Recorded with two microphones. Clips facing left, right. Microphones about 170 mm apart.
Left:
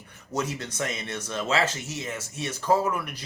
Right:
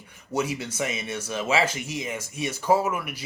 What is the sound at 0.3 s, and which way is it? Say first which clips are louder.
Speech: right 3 dB; 10° right (ahead or behind).